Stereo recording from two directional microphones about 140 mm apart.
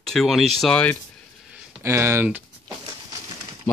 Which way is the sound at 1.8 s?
20° right (ahead or behind).